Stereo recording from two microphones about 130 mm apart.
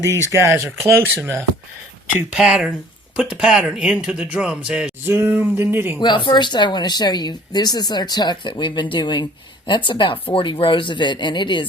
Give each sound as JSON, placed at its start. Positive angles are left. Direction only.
{"t": 0.3, "sound": "speech", "side_deg": -20}
{"t": 2.3, "sound": "speech", "side_deg": -5}
{"t": 6.0, "sound": "speech", "side_deg": 35}